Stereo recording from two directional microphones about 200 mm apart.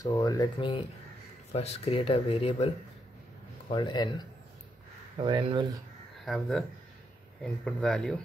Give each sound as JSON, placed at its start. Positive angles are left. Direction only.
{"t": 0.0, "sound": "speech", "side_deg": 20}
{"t": 5.2, "sound": "speech", "side_deg": -25}
{"t": 6.2, "sound": "speech", "side_deg": 0}